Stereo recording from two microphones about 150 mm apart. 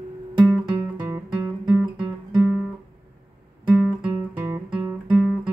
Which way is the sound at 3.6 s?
10° right (ahead or behind).